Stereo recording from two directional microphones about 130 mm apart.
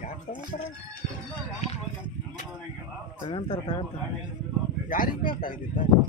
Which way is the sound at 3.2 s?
40° left (ahead or behind).